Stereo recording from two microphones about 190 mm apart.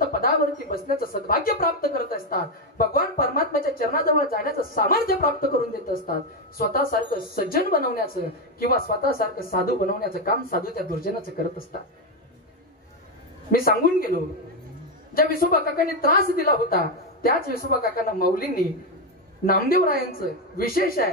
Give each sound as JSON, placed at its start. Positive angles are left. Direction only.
{"t": 0.2, "sound": "speech", "side_deg": 50}
{"t": 13.5, "sound": "speech", "side_deg": 50}